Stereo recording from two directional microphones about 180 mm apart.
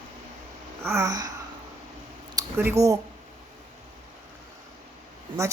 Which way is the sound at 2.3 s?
15° right (ahead or behind).